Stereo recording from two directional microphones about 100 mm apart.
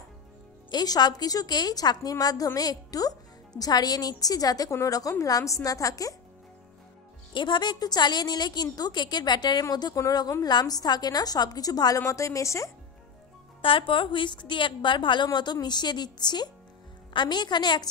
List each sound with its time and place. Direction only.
0.7 s a woman's voice: 40° left (ahead or behind)
7.3 s a woman's voice: 50° left (ahead or behind); by 12.7 s 30° left (ahead or behind)
13.6 s a woman's voice: 60° left (ahead or behind); by 17.8 s 45° left (ahead or behind)